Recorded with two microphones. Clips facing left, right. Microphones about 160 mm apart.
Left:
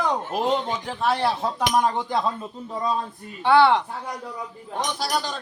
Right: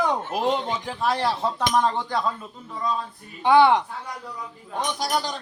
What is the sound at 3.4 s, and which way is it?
Speech, 15° right (ahead or behind).